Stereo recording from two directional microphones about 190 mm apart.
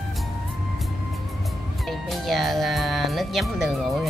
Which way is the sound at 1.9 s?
Centre (ahead or behind).